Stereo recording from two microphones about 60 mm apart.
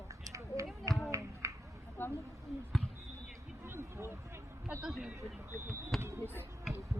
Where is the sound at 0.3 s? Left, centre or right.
Right.